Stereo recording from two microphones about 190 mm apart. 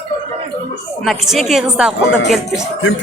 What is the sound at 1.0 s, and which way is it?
Speech, centre (ahead or behind).